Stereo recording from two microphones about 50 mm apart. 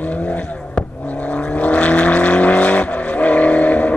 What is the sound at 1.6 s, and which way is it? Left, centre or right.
Vehicle, left.